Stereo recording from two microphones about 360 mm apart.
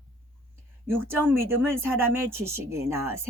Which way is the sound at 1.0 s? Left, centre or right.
Centre.